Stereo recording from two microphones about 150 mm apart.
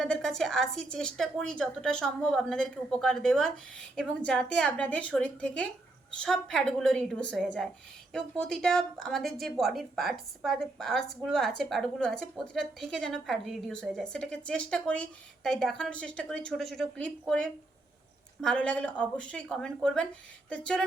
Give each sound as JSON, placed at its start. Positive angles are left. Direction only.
{"t": 0.0, "sound": "a woman's voice", "side_deg": 5}